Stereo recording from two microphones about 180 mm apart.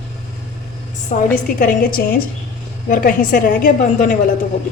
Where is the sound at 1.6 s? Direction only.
55° left (ahead or behind).